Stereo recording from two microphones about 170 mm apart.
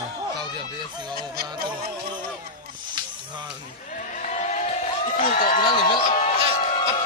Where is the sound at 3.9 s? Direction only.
45° left (ahead or behind).